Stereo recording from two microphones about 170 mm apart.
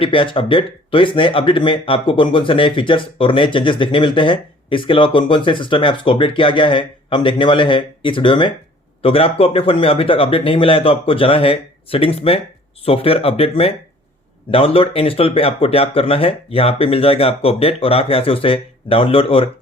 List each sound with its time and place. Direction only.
0.0 s speech: 30° left (ahead or behind)